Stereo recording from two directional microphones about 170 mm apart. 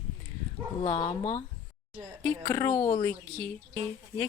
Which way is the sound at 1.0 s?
35° left (ahead or behind).